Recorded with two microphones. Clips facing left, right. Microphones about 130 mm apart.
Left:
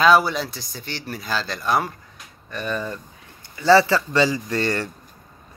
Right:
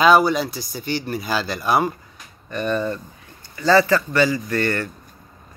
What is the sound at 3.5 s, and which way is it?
Speech, 15° left (ahead or behind).